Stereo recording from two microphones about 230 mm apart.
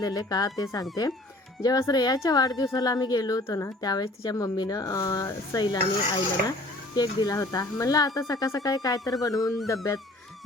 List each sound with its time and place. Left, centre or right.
0.0 s a woman's voice: centre